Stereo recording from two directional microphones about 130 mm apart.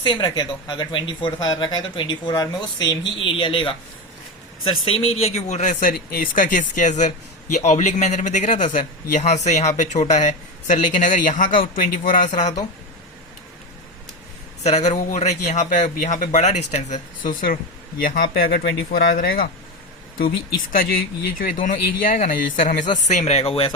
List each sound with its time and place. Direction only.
0.0 s a man's voice: 35° left (ahead or behind); by 12.5 s 70° left (ahead or behind)
14.6 s a man's voice: 60° left (ahead or behind); by 19.5 s 90° left
21.3 s speech: 90° left
23.0 s speech: 60° left (ahead or behind)